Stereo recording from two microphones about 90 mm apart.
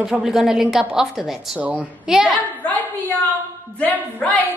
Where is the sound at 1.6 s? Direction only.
15° right (ahead or behind).